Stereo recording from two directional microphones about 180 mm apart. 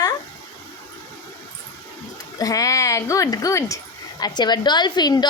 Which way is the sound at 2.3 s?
20° left (ahead or behind).